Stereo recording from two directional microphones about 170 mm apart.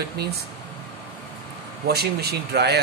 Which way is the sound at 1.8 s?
70° right (ahead or behind).